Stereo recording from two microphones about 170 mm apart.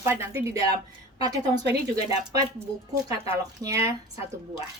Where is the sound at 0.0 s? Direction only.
15° right (ahead or behind).